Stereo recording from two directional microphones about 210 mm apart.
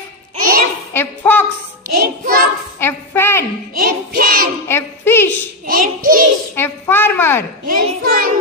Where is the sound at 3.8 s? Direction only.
45° right (ahead or behind).